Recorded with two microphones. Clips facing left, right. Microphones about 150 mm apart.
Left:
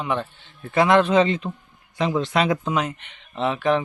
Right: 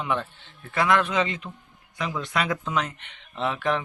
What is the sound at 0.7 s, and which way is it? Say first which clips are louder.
Speech: left 6 dB; 25° left (ahead or behind).